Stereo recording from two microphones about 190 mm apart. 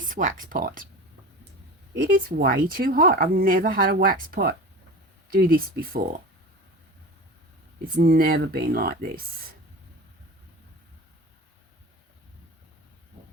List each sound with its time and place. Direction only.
0.1 s speech: 45° right (ahead or behind)
2.0 s speech: 50° right (ahead or behind)
7.9 s speech: 50° right (ahead or behind)